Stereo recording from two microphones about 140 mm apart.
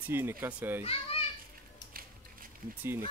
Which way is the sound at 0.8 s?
45° left (ahead or behind).